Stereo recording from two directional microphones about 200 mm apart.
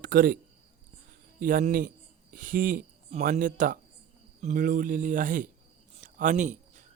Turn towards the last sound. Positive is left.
turn(degrees=-40)  # may be behind; listen again after turning